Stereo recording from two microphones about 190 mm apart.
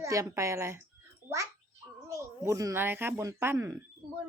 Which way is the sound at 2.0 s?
15° right (ahead or behind).